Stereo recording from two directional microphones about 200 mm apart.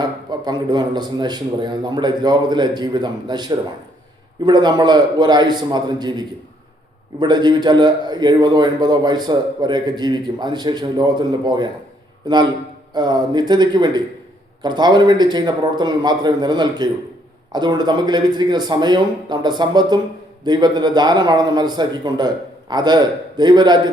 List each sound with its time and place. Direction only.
0.0 s a man's voice: 20° right (ahead or behind)
12.9 s a man's voice: 20° right (ahead or behind)